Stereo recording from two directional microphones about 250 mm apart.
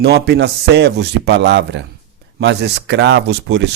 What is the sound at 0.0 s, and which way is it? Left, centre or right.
A man's voice, right.